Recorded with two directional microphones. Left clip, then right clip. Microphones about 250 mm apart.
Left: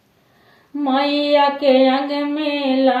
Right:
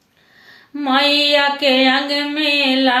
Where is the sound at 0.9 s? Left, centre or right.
Centre.